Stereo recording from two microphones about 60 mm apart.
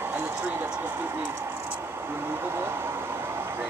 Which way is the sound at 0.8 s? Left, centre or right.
Right.